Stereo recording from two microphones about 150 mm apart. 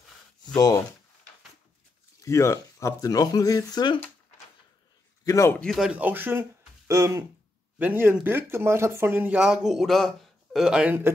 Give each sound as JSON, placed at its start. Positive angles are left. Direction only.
{"t": 0.6, "sound": "speech", "side_deg": 25}
{"t": 2.2, "sound": "speech", "side_deg": 20}
{"t": 5.2, "sound": "a man's voice", "side_deg": 20}
{"t": 5.6, "sound": "speech", "side_deg": 0}